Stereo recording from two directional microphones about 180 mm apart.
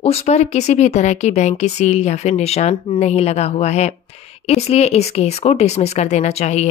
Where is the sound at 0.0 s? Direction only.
35° left (ahead or behind).